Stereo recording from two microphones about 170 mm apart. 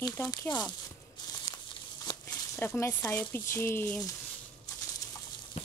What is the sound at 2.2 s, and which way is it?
Speech, 15° left (ahead or behind).